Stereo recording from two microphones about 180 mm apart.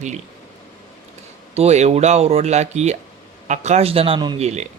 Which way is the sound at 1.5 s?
35° right (ahead or behind).